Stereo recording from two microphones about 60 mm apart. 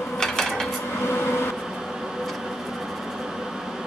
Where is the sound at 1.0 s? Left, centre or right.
Left.